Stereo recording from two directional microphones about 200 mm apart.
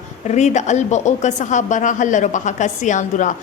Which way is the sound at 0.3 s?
35° left (ahead or behind).